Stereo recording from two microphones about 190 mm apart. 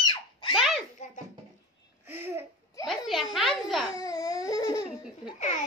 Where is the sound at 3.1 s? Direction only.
Centre (ahead or behind).